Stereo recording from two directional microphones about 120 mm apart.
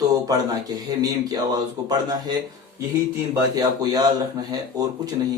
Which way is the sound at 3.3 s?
30° right (ahead or behind).